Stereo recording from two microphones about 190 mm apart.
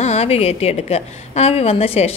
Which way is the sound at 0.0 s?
35° left (ahead or behind).